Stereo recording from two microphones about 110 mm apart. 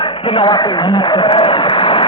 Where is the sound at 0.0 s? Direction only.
50° left (ahead or behind).